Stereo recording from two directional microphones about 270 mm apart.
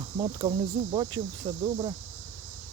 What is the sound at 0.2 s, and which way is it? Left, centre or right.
Speech, centre.